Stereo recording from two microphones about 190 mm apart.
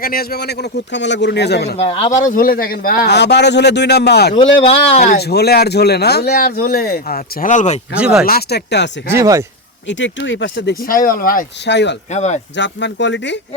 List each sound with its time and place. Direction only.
0.0 s speech: 50° left (ahead or behind)
1.7 s speech: 30° left (ahead or behind)
2.2 s speech: 45° left (ahead or behind)
4.6 s speech: 30° left (ahead or behind)
5.1 s speech: 60° left (ahead or behind); by 7.8 s 40° left (ahead or behind)
7.9 s speech: 5° right (ahead or behind)
8.2 s speech: 55° left (ahead or behind)
9.1 s speech: 15° right (ahead or behind)
9.9 s speech: 75° left (ahead or behind)
10.8 s speech: 50° left (ahead or behind); by 11.9 s 65° left (ahead or behind)
12.1 s speech: 35° left (ahead or behind)
12.5 s speech: 70° left (ahead or behind)